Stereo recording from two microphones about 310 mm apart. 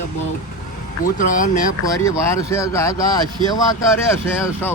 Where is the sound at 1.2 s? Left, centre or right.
Left.